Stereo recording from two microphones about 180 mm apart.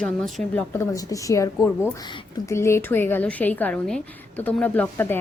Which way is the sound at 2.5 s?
15° left (ahead or behind).